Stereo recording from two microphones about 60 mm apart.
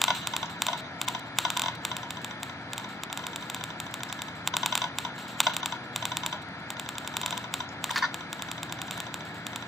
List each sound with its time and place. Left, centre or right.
0.0 s computer keyboard: centre
4.5 s typing: centre
5.4 s computer keyboard: centre
7.2 s typing: centre